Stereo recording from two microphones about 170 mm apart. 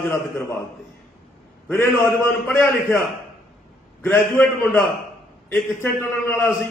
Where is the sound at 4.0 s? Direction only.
10° left (ahead or behind).